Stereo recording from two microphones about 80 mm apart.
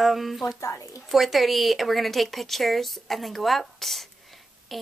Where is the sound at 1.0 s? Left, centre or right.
Centre.